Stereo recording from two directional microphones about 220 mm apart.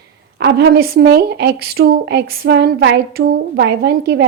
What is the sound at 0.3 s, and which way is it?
Speech, 50° right (ahead or behind).